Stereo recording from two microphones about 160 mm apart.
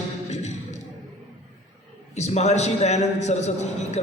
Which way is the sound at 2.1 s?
45° left (ahead or behind).